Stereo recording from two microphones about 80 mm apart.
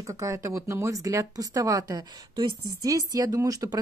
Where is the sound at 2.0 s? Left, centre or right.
Right.